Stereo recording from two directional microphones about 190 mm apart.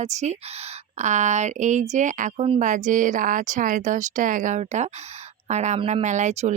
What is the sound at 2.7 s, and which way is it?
Speech, 40° right (ahead or behind).